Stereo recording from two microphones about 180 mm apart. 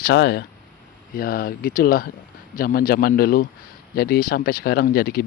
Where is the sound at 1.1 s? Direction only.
55° left (ahead or behind).